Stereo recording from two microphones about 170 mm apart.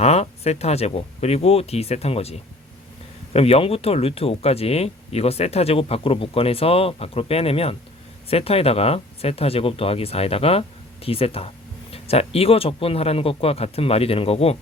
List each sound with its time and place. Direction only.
0.0 s speech: 40° left (ahead or behind)